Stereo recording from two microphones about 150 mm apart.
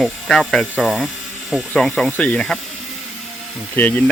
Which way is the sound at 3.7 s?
10° left (ahead or behind).